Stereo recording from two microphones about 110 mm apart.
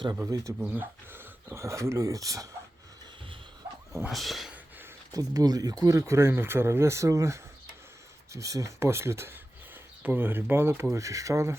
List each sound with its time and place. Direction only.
0.3 s speech: 30° right (ahead or behind)
0.6 s speech: 15° right (ahead or behind)
4.1 s speech: centre (ahead or behind)
5.1 s speech: 35° right (ahead or behind)